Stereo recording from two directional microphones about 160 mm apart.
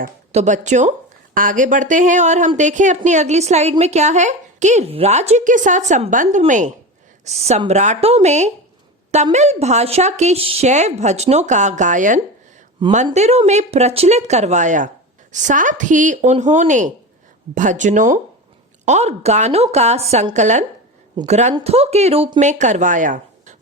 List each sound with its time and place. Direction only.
0.3 s a woman's voice: 45° right (ahead or behind)
12.8 s speech: 30° right (ahead or behind)
13.1 s a woman's voice: 45° right (ahead or behind)